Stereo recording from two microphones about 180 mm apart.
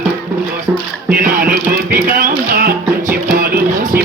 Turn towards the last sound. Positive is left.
turn(degrees=-55)  # may be behind; listen again after turning